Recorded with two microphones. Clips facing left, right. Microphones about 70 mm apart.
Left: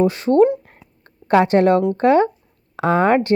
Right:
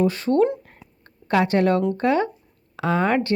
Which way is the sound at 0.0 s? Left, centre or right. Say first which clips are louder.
Left 5 dB; left.